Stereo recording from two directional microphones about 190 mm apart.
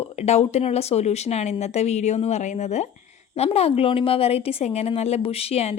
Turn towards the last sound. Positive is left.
turn(degrees=30)  # may be behind; listen again after turning